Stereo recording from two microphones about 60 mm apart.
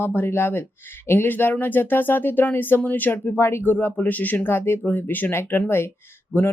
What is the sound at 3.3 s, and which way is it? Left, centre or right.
Speech, left.